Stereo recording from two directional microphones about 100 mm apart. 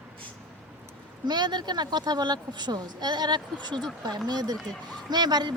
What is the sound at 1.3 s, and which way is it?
Speech, 45° right (ahead or behind).